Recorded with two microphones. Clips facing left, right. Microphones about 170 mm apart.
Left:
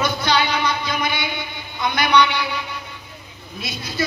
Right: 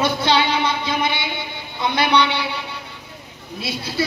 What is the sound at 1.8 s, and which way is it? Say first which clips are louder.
Speech: even; 30° right (ahead or behind).